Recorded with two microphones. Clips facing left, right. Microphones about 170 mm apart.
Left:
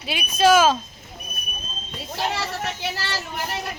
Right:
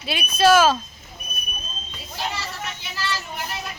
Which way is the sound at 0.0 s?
15° left (ahead or behind).